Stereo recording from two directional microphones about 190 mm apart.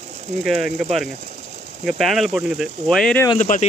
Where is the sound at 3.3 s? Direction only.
45° left (ahead or behind).